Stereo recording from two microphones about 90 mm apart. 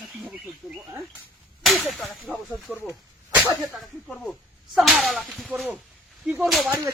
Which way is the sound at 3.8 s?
5° left (ahead or behind).